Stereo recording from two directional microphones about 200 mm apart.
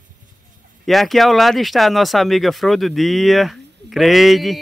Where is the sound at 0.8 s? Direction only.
Centre (ahead or behind).